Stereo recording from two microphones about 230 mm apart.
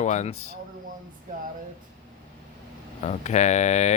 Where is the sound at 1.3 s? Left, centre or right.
Right.